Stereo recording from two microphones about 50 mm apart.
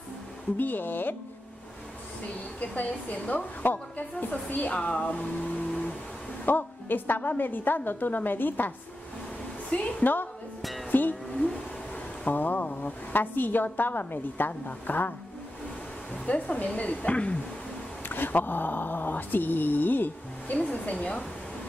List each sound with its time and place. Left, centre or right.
0.6 s a woman's voice: left
2.6 s a woman's voice: left
6.4 s a woman's voice: left
9.7 s a woman's voice: left
10.6 s music: centre
10.9 s music: left
12.3 s a woman's voice: left
16.3 s a woman's voice: left
18.0 s a woman's voice: left